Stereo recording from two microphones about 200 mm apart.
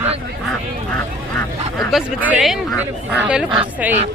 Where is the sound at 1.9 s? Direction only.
5° right (ahead or behind).